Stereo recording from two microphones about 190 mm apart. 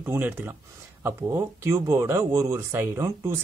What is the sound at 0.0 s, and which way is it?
Speech, 10° right (ahead or behind).